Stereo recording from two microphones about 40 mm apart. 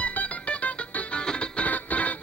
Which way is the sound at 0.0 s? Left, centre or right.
Left.